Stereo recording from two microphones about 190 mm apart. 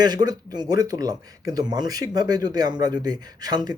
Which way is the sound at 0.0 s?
20° right (ahead or behind).